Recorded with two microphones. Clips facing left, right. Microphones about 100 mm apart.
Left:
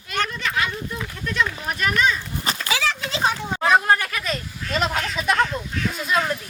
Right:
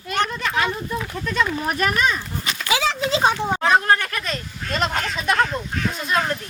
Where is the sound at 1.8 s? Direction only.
45° right (ahead or behind).